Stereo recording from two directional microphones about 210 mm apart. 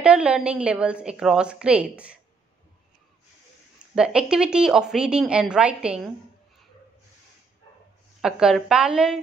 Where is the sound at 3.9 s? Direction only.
5° right (ahead or behind).